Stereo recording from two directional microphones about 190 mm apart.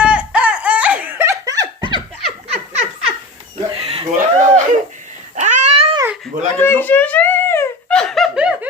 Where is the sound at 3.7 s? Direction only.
30° right (ahead or behind).